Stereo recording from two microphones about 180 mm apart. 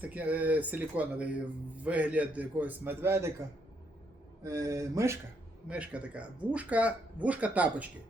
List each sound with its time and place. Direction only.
0.0 s speech: 10° right (ahead or behind)
4.4 s speech: 15° right (ahead or behind)